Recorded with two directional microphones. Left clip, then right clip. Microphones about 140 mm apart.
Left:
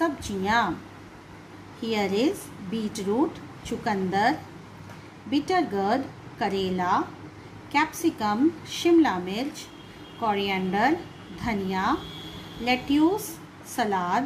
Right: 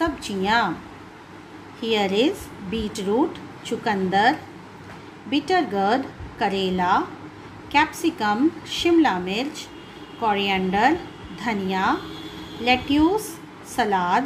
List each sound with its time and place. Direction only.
0.0 s a woman's voice: 15° right (ahead or behind)
1.8 s a woman's voice: 15° right (ahead or behind)